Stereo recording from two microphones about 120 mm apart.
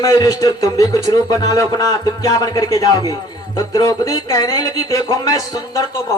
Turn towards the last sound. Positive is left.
turn(degrees=35)  # may be behind; listen again after turning